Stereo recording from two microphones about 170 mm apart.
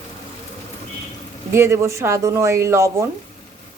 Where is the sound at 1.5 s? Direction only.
15° right (ahead or behind).